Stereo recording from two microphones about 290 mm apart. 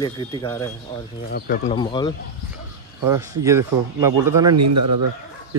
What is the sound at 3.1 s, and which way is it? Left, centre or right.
Speech, centre.